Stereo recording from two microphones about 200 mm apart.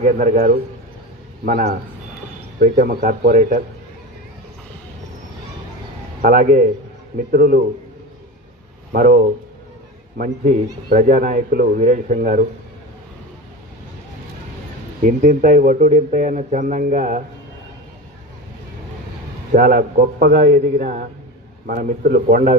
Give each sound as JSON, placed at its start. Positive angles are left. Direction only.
{"t": 0.0, "sound": "a man's voice", "side_deg": -40}
{"t": 2.6, "sound": "a man's voice", "side_deg": -45}
{"t": 6.2, "sound": "a man's voice", "side_deg": -40}
{"t": 8.9, "sound": "a man's voice", "side_deg": -45}
{"t": 15.0, "sound": "a man's voice", "side_deg": -40}
{"t": 19.5, "sound": "a man's voice", "side_deg": -45}